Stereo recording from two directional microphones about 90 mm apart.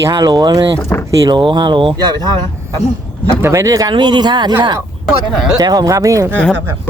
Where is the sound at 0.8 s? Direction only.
30° left (ahead or behind).